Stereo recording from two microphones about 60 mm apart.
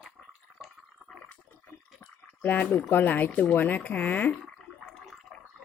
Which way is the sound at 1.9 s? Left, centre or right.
Left.